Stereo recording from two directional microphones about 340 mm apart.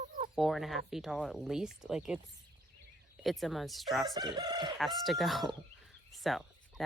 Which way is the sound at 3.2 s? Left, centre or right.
Centre.